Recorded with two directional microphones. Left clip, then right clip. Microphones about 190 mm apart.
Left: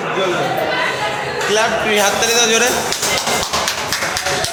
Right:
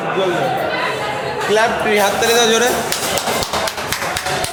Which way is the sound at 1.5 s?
15° right (ahead or behind).